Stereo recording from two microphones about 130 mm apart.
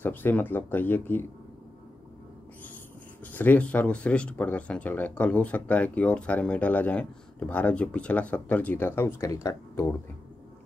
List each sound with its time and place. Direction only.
0.0 s speech: 15° left (ahead or behind)
3.3 s speech: 15° left (ahead or behind)